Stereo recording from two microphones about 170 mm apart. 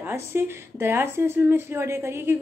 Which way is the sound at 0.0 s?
15° right (ahead or behind).